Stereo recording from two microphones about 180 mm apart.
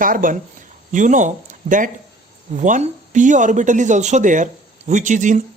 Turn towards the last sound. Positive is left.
turn(degrees=-45)  # may be behind; listen again after turning